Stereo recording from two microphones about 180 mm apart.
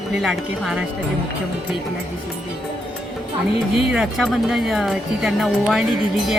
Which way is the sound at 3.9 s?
5° right (ahead or behind).